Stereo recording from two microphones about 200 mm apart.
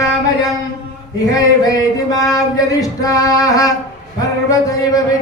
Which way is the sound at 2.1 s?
15° left (ahead or behind).